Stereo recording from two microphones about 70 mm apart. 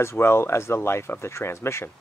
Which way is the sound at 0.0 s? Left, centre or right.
Left.